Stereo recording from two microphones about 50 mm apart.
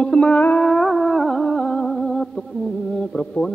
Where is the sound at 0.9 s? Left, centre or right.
Centre.